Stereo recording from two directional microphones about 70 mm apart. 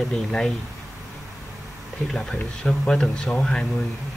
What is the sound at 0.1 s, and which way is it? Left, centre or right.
Speech, centre.